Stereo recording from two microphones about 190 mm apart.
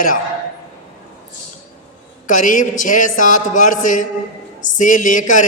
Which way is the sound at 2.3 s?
45° left (ahead or behind).